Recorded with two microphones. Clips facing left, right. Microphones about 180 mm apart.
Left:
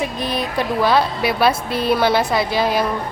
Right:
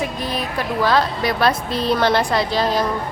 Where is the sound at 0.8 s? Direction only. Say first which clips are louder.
Even; 10° left (ahead or behind).